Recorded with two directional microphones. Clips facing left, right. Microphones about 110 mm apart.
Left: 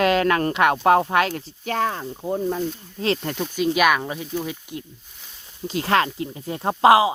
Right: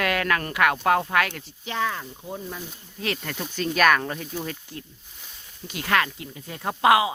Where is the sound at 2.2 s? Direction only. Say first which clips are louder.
Left 13 dB; 50° left (ahead or behind).